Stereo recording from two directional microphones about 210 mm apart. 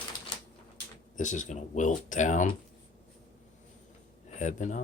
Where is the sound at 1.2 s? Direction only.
35° left (ahead or behind).